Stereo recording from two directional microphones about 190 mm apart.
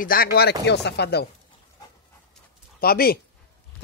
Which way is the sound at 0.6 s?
60° left (ahead or behind).